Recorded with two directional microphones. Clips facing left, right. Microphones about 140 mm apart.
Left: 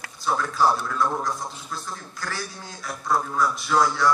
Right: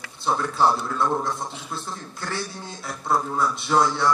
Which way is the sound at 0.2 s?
30° right (ahead or behind).